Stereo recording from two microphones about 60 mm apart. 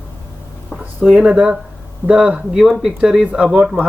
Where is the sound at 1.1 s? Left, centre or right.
Centre.